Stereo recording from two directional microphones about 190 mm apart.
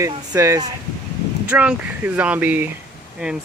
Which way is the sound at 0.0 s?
15° right (ahead or behind).